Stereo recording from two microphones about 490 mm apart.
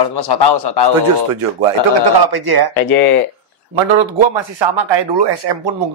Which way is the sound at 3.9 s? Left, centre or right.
Right.